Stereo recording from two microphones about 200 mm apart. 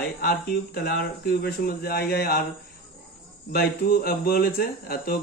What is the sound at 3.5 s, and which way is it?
Speech, 50° left (ahead or behind).